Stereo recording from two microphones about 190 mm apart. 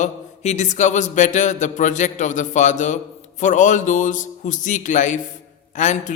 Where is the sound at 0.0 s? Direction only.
40° left (ahead or behind).